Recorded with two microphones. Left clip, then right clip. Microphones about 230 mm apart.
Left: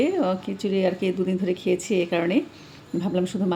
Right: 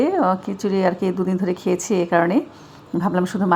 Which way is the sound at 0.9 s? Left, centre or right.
Centre.